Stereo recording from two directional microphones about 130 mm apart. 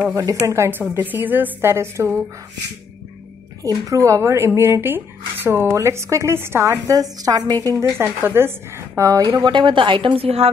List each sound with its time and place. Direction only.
0.1 s a woman's voice: 25° right (ahead or behind)
3.6 s a woman's voice: 30° right (ahead or behind); by 10.5 s 50° right (ahead or behind)